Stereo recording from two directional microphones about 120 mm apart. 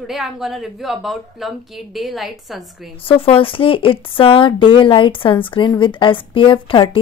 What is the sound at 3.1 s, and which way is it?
A woman's voice, 45° left (ahead or behind).